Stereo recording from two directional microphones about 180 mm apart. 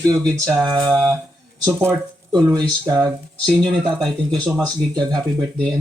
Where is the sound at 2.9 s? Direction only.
15° right (ahead or behind).